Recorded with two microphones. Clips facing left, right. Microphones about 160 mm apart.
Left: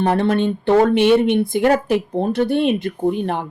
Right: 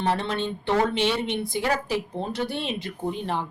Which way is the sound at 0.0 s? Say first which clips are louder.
Left 9 dB; 55° left (ahead or behind).